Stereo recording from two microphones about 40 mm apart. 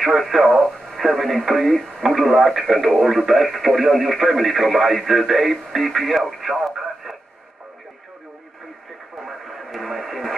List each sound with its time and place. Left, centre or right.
0.3 s speech: centre
6.4 s radio: centre
9.2 s radio: centre